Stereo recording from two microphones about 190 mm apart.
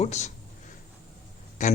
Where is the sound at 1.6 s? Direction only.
40° left (ahead or behind).